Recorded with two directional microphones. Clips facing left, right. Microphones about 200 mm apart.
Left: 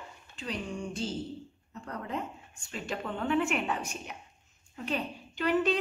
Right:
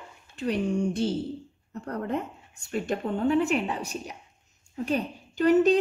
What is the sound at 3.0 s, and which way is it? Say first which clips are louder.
A woman's voice: right 4 dB; 40° right (ahead or behind).